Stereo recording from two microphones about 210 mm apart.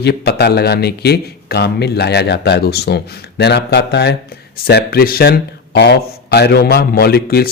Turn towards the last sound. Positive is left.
turn(degrees=45)  # may be behind; listen again after turning